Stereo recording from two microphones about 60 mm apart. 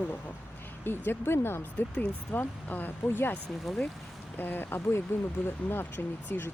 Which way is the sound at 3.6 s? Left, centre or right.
Centre.